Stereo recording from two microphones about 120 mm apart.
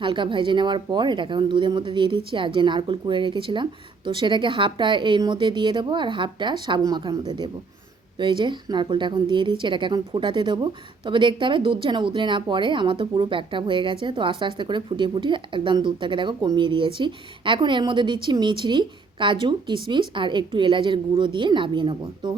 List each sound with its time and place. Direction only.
0.0 s a woman's voice: 40° right (ahead or behind)